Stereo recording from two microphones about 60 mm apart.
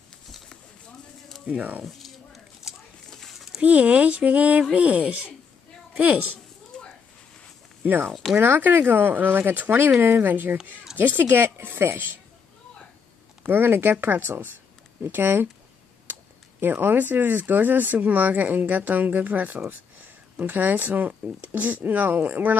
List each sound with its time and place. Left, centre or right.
1.6 s speech: right
1.9 s a sound: centre
3.6 s speech: right
7.8 s speech: right
8.1 s speech: centre
8.4 s speech: right
9.9 s speech: right
13.5 s speech: right